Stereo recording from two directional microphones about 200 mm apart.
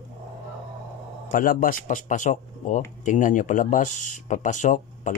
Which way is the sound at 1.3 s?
45° left (ahead or behind).